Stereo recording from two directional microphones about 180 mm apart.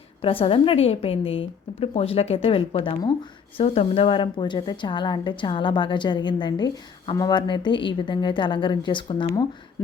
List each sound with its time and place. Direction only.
0.2 s a woman's voice: 30° left (ahead or behind)